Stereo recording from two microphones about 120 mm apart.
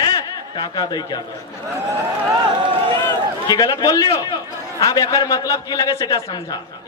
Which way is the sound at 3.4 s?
30° left (ahead or behind).